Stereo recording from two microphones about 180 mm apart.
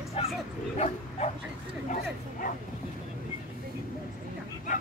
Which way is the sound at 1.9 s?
50° left (ahead or behind).